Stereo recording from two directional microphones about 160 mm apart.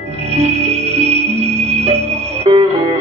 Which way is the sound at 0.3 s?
40° right (ahead or behind).